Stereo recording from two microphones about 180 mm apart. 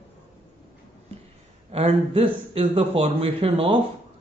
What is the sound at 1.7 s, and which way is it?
A man's voice, 35° right (ahead or behind).